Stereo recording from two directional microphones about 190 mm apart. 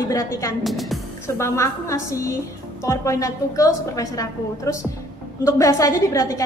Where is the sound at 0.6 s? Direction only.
Centre (ahead or behind).